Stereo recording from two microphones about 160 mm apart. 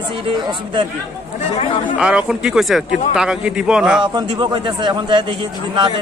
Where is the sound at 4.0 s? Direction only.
30° right (ahead or behind).